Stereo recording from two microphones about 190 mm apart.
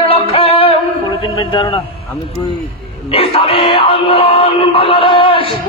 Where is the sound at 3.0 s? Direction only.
30° left (ahead or behind).